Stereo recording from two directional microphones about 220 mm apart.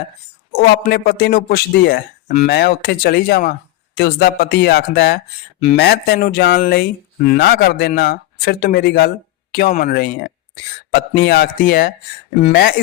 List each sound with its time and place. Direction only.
0.5 s speech: 45° left (ahead or behind)